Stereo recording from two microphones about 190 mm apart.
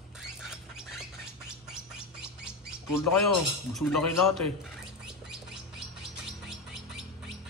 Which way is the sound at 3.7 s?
Centre (ahead or behind).